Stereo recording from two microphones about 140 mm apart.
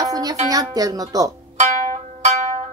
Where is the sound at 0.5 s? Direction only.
25° right (ahead or behind).